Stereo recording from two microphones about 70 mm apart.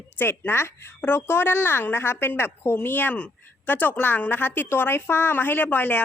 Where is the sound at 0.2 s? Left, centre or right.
Left.